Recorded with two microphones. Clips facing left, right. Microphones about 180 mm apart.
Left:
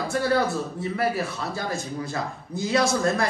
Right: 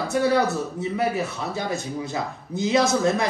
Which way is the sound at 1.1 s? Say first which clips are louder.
Right 1 dB; 20° right (ahead or behind).